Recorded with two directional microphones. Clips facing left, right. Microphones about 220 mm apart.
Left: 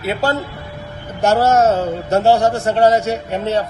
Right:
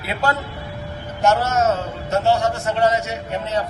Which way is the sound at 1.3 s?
35° left (ahead or behind).